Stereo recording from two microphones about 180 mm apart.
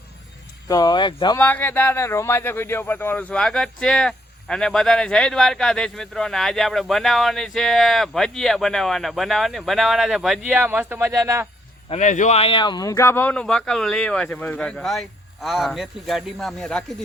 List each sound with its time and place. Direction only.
0.7 s speech: 20° left (ahead or behind)
1.4 s speech: 10° left (ahead or behind); by 11.4 s 15° right (ahead or behind)
11.9 s speech: 40° left (ahead or behind); by 16.8 s 5° left (ahead or behind)